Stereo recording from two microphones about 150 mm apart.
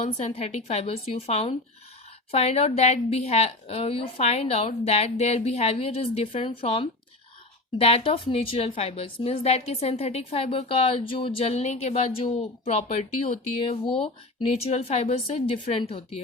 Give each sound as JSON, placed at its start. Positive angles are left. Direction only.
{"t": 0.0, "sound": "a woman's voice", "side_deg": 50}